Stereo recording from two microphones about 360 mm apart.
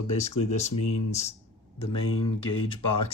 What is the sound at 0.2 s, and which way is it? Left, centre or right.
Speech, centre.